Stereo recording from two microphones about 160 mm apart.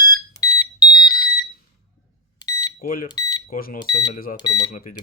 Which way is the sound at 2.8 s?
65° left (ahead or behind).